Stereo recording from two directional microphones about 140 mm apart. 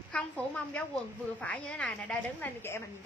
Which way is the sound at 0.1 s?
10° left (ahead or behind).